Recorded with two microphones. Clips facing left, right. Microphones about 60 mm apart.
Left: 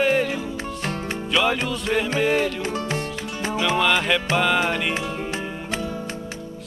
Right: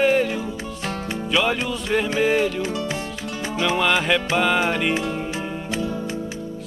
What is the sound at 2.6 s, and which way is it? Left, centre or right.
Music, left.